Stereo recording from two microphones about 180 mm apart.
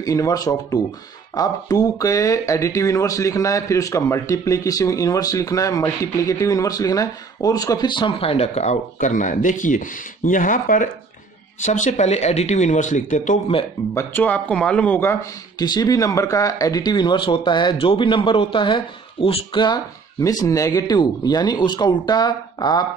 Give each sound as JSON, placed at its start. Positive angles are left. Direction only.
{"t": 0.0, "sound": "speech", "side_deg": 20}
{"t": 13.9, "sound": "speech", "side_deg": 10}
{"t": 15.6, "sound": "speech", "side_deg": 20}